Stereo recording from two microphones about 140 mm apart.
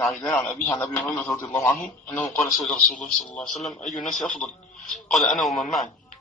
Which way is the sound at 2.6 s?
5° left (ahead or behind).